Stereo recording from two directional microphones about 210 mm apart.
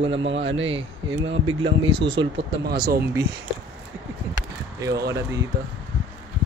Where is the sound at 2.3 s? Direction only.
55° right (ahead or behind).